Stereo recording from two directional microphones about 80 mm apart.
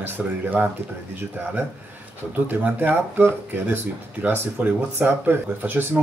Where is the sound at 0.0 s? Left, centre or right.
Right.